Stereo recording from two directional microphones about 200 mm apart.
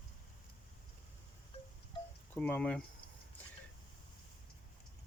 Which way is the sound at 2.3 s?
10° left (ahead or behind).